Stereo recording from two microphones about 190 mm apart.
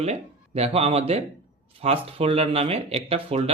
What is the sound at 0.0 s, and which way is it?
Speech, 35° right (ahead or behind).